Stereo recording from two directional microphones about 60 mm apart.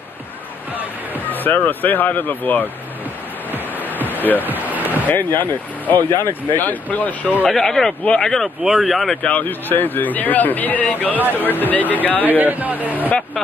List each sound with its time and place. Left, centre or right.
1.3 s speech: left
3.9 s a sound: right
4.4 s waves: right
5.0 s speech: left
6.0 s speech: left
6.5 s speech: left
7.4 s speech: centre
8.6 s speech: centre
9.2 s speech: left
12.3 s speech: right